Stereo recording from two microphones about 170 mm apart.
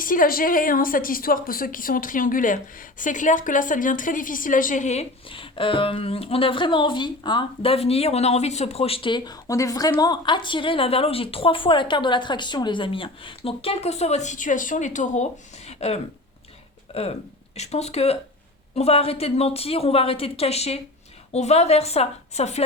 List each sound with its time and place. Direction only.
0.0 s a woman's voice: 55° left (ahead or behind); by 22.6 s 40° left (ahead or behind)